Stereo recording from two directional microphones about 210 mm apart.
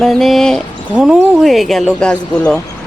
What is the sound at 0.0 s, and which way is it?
Speech, centre (ahead or behind).